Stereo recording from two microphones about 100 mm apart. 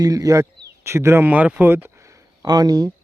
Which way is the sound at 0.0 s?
35° right (ahead or behind).